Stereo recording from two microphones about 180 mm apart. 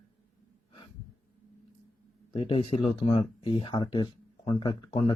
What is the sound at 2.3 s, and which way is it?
Speech, 30° left (ahead or behind).